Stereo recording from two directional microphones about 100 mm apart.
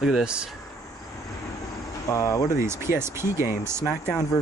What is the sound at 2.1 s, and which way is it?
Speech, 35° left (ahead or behind).